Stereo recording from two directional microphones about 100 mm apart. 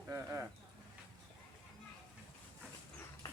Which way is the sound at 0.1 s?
25° right (ahead or behind).